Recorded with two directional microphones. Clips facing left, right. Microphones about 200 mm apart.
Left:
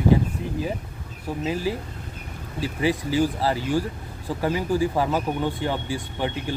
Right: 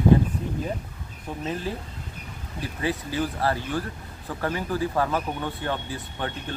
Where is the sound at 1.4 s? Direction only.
10° left (ahead or behind).